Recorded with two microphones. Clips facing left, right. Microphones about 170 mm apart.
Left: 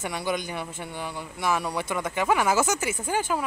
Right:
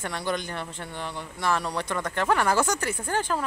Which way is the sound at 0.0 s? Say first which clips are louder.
Left 1 dB; 10° left (ahead or behind).